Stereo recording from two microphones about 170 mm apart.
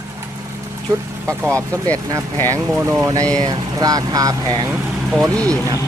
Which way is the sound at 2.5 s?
10° right (ahead or behind).